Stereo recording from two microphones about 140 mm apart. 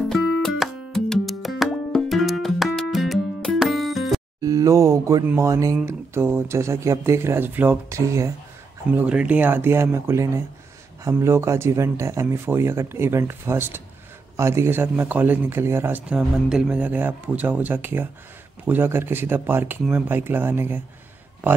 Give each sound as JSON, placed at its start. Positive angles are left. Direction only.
{"t": 0.1, "sound": "music", "side_deg": 0}
{"t": 4.4, "sound": "speech", "side_deg": -25}
{"t": 8.9, "sound": "speech", "side_deg": -10}